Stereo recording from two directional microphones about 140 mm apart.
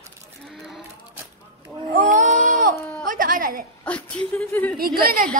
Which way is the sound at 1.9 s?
65° right (ahead or behind).